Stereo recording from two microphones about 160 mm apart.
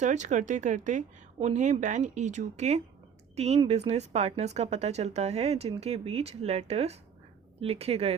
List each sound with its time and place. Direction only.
0.0 s speech: 50° right (ahead or behind)